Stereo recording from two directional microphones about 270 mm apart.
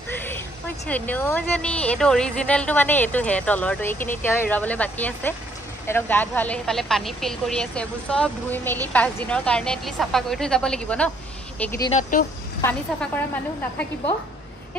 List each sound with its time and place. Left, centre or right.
0.1 s a sound: centre
0.8 s a woman's voice: centre
11.9 s speech: left
12.6 s speech: centre